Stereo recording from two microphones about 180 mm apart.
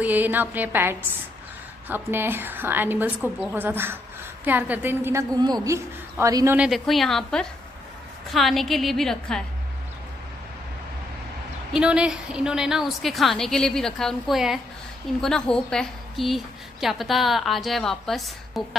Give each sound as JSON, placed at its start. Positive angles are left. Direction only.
{"t": 0.0, "sound": "a woman's voice", "side_deg": -10}
{"t": 11.7, "sound": "a woman's voice", "side_deg": -5}